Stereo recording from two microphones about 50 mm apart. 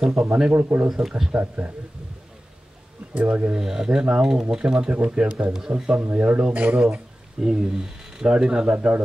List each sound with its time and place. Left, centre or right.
0.1 s speech: right
0.6 s speech: right
0.8 s speech: centre
1.3 s speech: right
3.2 s speech: right
3.5 s speech: centre
4.0 s speech: right
4.3 s speech: centre
6.1 s speech: right
6.8 s speech: centre
8.3 s speech: centre